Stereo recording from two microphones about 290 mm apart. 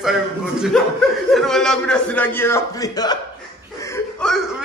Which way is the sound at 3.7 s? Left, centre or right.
Centre.